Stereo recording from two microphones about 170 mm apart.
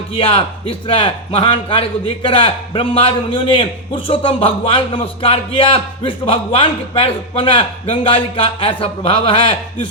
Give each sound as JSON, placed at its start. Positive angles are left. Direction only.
{"t": 0.1, "sound": "speech", "side_deg": 30}